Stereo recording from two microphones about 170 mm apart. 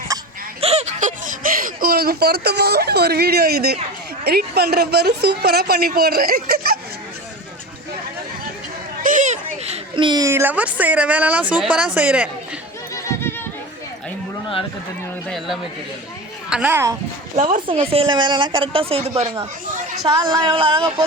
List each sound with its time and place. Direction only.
0.1 s a sound: 20° right (ahead or behind)
0.6 s a woman's voice: 40° right (ahead or behind); by 6.7 s 65° right (ahead or behind)
9.0 s a child's voice: 50° right (ahead or behind); by 12.3 s 5° right (ahead or behind)
12.9 s a sound: 20° left (ahead or behind)
16.5 s speech: 10° right (ahead or behind)
17.3 s a woman's voice: 40° right (ahead or behind)
20.1 s speech: 25° right (ahead or behind)